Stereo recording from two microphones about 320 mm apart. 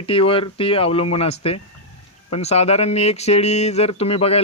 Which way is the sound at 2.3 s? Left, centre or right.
Centre.